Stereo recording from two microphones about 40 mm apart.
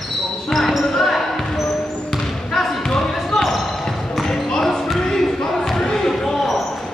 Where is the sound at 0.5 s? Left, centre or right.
Centre.